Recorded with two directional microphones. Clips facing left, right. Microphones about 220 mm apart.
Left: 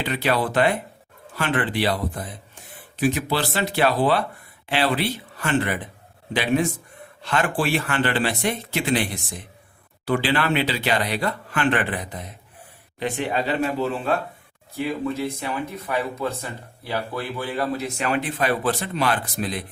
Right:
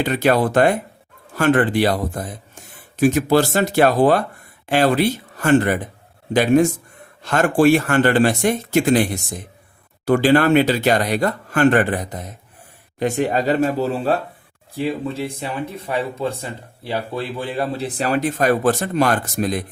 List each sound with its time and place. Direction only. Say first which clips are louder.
0.0 s speech: right 6 dB; 45° right (ahead or behind)